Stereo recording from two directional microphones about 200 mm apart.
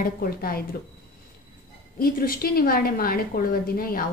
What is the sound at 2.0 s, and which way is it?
A woman's voice, 50° left (ahead or behind).